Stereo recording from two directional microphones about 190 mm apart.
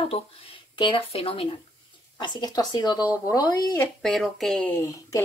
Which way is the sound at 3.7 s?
5° left (ahead or behind).